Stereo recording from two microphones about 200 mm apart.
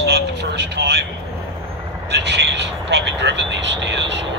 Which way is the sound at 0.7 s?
55° right (ahead or behind).